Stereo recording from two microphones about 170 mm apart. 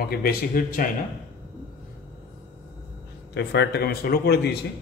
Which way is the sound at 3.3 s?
90° left.